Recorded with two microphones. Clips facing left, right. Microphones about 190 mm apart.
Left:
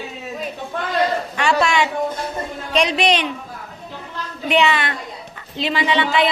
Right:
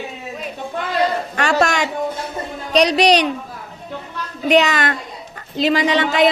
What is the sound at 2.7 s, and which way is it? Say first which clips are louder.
Speech: right 4 dB; 40° right (ahead or behind).